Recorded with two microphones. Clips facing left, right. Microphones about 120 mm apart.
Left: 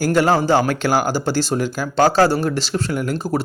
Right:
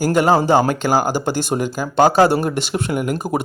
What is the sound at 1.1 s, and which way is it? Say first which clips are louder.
Speech: even; 50° right (ahead or behind).